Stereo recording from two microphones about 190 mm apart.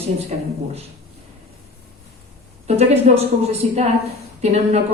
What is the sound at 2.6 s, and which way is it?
A woman's voice, 35° right (ahead or behind).